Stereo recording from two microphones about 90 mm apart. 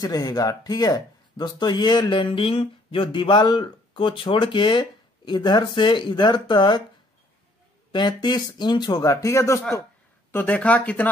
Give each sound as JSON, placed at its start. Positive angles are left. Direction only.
{"t": 0.0, "sound": "speech", "side_deg": 45}
{"t": 7.9, "sound": "speech", "side_deg": 55}
{"t": 9.0, "sound": "speech", "side_deg": 35}
{"t": 10.3, "sound": "speech", "side_deg": 15}